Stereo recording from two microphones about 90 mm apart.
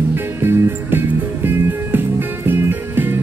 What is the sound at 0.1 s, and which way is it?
Music, 25° right (ahead or behind).